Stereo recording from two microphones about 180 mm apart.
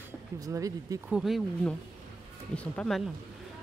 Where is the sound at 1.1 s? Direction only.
Centre (ahead or behind).